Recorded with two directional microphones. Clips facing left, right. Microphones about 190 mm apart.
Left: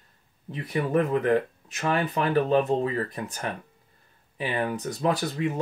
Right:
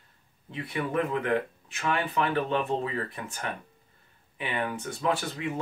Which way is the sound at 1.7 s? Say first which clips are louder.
Left 3 dB; 40° left (ahead or behind).